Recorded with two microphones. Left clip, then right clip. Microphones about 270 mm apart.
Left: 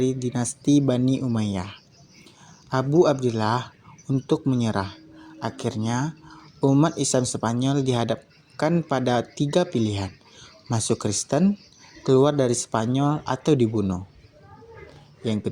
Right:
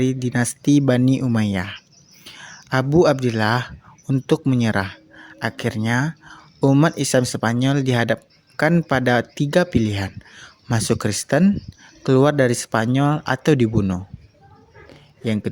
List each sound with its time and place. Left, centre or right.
0.0 s speech: right